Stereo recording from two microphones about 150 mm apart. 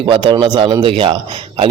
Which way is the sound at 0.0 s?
35° right (ahead or behind).